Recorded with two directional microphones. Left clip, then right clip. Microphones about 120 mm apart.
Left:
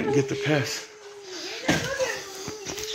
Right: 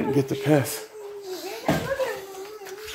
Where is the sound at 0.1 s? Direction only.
30° right (ahead or behind).